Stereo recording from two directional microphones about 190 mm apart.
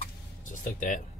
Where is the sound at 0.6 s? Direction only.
45° left (ahead or behind).